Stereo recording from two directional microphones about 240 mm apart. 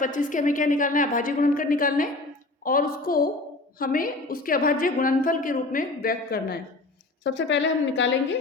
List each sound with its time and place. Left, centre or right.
0.0 s a woman's voice: left